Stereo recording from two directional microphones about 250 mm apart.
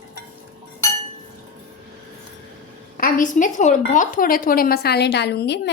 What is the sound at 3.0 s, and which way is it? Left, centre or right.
A woman's voice, left.